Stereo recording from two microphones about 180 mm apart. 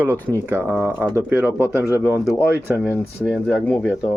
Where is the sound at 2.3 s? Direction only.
10° left (ahead or behind).